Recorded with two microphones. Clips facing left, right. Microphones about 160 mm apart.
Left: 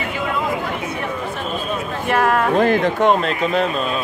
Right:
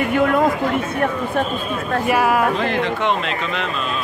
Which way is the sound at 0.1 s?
55° right (ahead or behind).